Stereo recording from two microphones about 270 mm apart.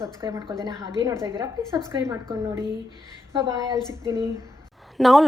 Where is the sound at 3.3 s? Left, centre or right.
Centre.